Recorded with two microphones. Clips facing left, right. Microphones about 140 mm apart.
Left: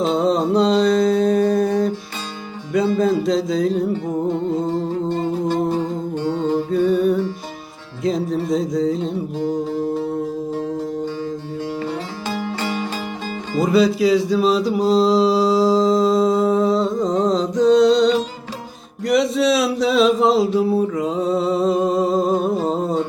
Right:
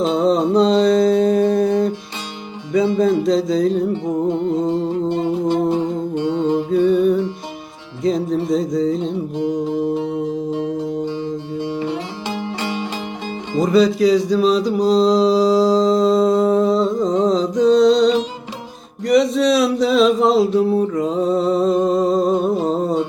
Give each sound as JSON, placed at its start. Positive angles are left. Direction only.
{"t": 0.0, "sound": "mantra", "side_deg": 0}
{"t": 3.0, "sound": "mantra", "side_deg": 0}
{"t": 3.9, "sound": "music", "side_deg": -20}
{"t": 6.7, "sound": "music", "side_deg": 0}
{"t": 8.0, "sound": "mantra", "side_deg": 0}
{"t": 9.4, "sound": "music", "side_deg": -20}
{"t": 13.6, "sound": "mantra", "side_deg": 5}
{"t": 22.6, "sound": "humming", "side_deg": 0}